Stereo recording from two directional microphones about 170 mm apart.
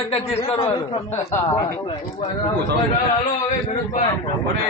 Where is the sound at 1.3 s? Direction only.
20° left (ahead or behind).